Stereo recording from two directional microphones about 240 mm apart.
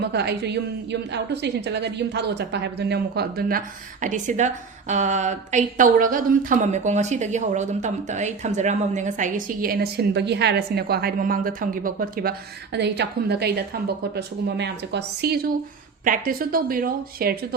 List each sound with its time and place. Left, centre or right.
0.0 s a woman's voice: right